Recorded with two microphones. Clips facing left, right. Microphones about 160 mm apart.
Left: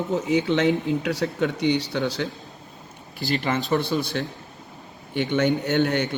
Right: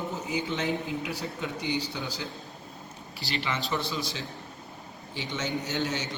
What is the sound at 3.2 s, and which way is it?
A man's voice, 50° left (ahead or behind).